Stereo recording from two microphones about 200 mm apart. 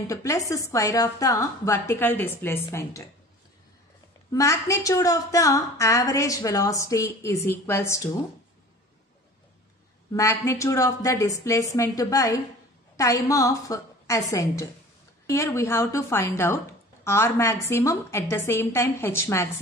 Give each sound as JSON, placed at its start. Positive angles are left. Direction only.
{"t": 0.0, "sound": "a woman's voice", "side_deg": 15}
{"t": 4.3, "sound": "a woman's voice", "side_deg": 15}
{"t": 10.1, "sound": "a woman's voice", "side_deg": 15}